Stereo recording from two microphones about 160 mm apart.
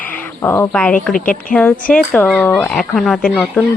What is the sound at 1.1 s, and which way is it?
Speech, 55° left (ahead or behind).